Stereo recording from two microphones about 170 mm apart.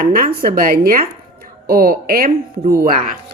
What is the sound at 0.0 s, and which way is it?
Speech, 60° right (ahead or behind).